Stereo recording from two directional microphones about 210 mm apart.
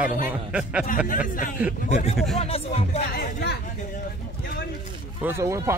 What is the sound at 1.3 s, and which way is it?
Speech, 40° left (ahead or behind).